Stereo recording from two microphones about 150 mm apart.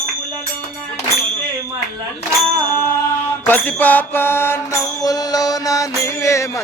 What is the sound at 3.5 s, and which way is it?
Mantra, 15° left (ahead or behind).